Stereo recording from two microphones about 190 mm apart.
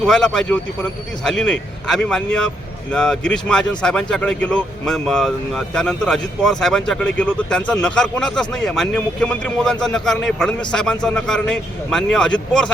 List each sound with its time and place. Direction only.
0.0 s speech: 5° left (ahead or behind)